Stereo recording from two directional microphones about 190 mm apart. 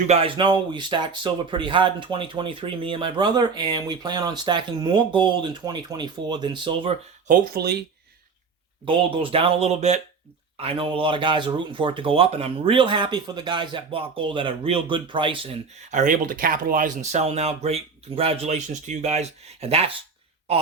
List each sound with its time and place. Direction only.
0.1 s speech: 30° right (ahead or behind)
7.3 s speech: 55° right (ahead or behind)
8.8 s speech: 30° right (ahead or behind)
15.9 s speech: 40° right (ahead or behind)